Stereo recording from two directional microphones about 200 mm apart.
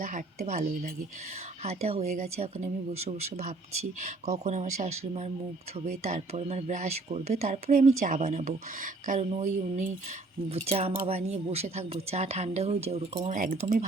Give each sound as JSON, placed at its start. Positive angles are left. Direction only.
{"t": 0.0, "sound": "speech", "side_deg": -40}